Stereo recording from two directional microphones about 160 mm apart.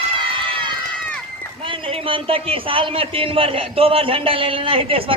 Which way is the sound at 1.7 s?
35° right (ahead or behind).